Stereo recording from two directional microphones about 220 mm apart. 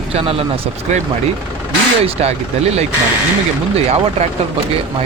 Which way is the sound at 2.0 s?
25° right (ahead or behind).